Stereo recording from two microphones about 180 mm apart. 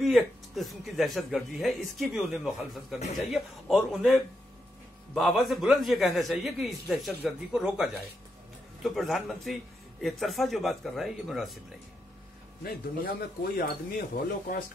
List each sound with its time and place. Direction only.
0.0 s speech: centre (ahead or behind)
12.6 s speech: 55° left (ahead or behind)